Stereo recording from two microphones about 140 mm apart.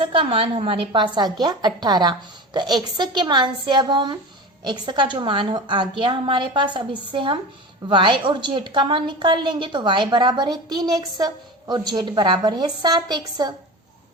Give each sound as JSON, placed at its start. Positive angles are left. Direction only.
{"t": 0.0, "sound": "a woman's voice", "side_deg": -40}